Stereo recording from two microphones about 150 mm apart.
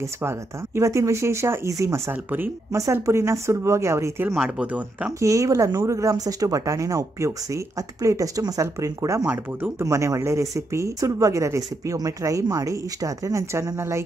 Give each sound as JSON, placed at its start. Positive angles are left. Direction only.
{"t": 0.0, "sound": "speech", "side_deg": -20}
{"t": 4.3, "sound": "speech", "side_deg": -5}
{"t": 5.2, "sound": "speech", "side_deg": -20}